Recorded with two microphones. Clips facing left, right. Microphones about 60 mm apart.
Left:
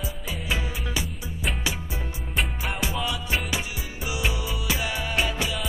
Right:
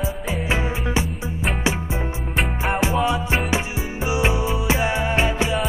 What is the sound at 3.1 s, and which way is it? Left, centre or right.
Music, right.